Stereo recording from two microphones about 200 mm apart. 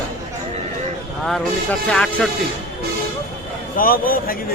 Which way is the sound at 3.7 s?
45° left (ahead or behind).